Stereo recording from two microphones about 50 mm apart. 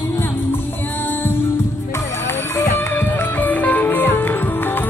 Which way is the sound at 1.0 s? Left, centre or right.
Left.